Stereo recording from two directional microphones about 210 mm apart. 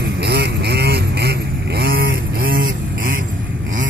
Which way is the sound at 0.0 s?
50° right (ahead or behind).